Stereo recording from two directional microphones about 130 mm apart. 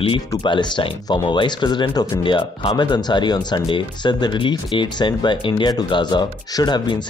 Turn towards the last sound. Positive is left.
turn(degrees=35)  # may be behind; listen again after turning